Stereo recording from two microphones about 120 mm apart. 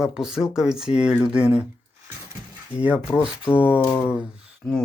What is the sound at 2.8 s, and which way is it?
Speech, 10° right (ahead or behind).